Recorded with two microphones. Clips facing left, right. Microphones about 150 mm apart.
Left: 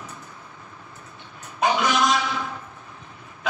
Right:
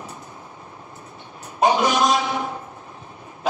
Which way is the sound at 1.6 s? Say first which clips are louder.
Right 3 dB; 30° right (ahead or behind).